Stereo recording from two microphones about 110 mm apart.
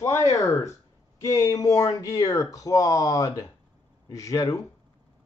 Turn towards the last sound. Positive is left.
turn(degrees=30)  # may be behind; listen again after turning